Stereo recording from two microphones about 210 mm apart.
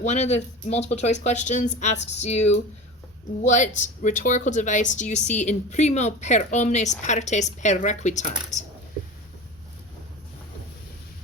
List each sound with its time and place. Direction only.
0.0 s speech: 35° left (ahead or behind)